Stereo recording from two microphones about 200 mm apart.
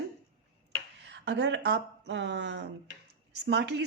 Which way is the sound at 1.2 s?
60° right (ahead or behind).